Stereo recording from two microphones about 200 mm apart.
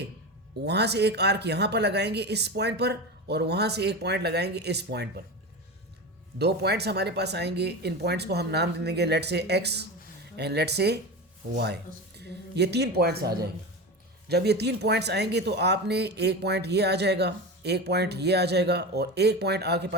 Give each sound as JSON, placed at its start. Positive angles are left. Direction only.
{"t": 0.6, "sound": "speech", "side_deg": -55}
{"t": 6.4, "sound": "speech", "side_deg": -55}